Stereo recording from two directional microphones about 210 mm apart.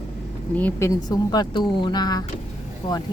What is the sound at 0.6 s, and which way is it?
Speech, 10° left (ahead or behind).